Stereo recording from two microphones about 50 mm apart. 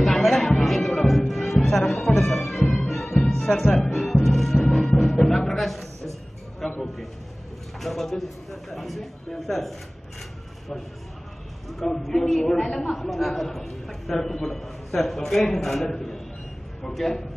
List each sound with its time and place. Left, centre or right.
0.0 s music: centre
2.9 s music: centre
6.6 s a sound: centre
7.8 s a man's voice: centre
11.8 s a man's voice: centre